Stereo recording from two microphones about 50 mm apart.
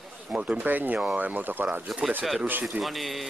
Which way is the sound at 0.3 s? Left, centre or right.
Right.